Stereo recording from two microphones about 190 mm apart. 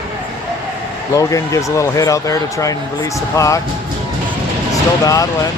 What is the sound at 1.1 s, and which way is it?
Speech, 15° left (ahead or behind).